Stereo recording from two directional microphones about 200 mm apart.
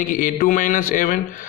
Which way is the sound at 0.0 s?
40° left (ahead or behind).